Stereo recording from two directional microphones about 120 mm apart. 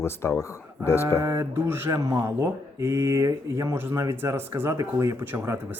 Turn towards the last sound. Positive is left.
turn(degrees=-20)  # may be behind; listen again after turning